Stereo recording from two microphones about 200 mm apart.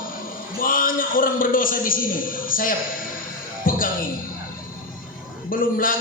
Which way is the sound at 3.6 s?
45° left (ahead or behind).